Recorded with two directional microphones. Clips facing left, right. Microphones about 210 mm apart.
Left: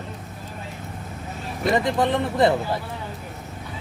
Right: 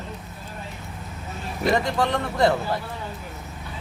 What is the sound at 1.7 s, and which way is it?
Speech, 20° left (ahead or behind).